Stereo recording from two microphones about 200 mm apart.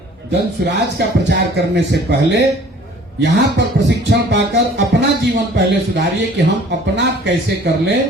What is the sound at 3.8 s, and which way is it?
Speech, 60° right (ahead or behind).